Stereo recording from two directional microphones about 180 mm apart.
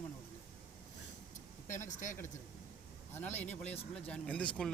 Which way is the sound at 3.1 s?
10° left (ahead or behind).